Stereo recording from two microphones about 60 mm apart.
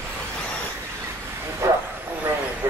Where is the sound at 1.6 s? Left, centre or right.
Right.